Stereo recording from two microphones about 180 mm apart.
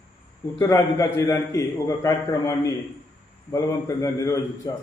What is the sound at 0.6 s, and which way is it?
A man's voice, 20° left (ahead or behind).